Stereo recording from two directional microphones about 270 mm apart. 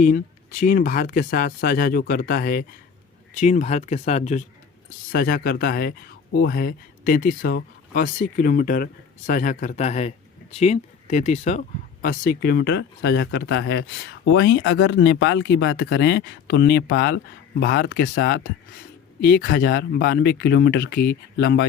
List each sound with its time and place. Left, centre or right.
0.0 s speech: left